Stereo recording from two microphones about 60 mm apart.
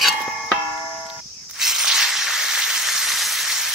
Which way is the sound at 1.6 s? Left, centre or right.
Centre.